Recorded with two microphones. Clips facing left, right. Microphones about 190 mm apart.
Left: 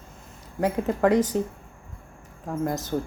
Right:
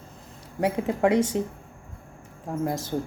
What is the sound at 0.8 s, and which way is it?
Speech, 25° right (ahead or behind).